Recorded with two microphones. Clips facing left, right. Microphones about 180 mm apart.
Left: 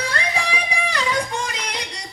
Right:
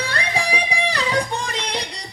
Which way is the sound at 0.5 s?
35° right (ahead or behind).